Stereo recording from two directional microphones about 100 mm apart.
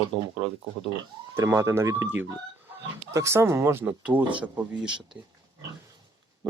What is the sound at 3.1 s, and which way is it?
Speech, 30° right (ahead or behind).